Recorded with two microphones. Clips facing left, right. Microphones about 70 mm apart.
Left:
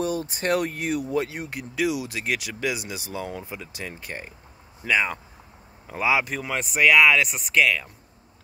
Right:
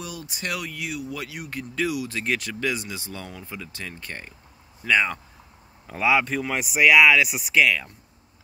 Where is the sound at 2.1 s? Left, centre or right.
Centre.